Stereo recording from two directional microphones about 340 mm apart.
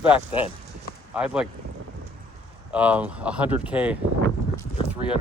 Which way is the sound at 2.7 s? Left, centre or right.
Centre.